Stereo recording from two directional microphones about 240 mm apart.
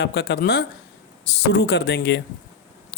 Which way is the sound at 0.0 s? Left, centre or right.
Left.